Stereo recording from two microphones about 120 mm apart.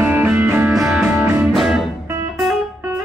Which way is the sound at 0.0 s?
10° right (ahead or behind).